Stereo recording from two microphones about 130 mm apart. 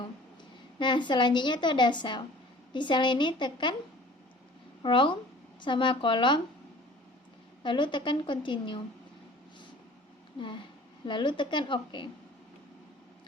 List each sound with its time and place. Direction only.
0.8 s a woman's voice: 35° left (ahead or behind)
4.8 s a woman's voice: 40° left (ahead or behind)
7.6 s a woman's voice: 35° left (ahead or behind)
11.0 s a woman's voice: 40° left (ahead or behind)